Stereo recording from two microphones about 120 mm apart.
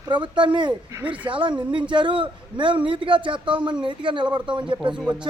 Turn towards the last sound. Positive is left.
turn(degrees=-5)  # may be behind; listen again after turning